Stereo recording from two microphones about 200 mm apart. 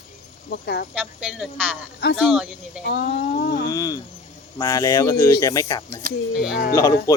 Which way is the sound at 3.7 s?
15° left (ahead or behind).